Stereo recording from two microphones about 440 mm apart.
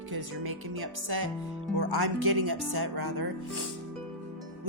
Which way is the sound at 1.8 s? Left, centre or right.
Right.